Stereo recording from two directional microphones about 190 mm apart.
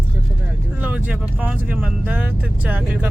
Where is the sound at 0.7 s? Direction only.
5° right (ahead or behind).